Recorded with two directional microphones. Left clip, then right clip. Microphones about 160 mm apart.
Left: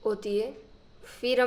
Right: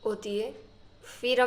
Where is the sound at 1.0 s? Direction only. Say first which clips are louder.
Even; 35° left (ahead or behind).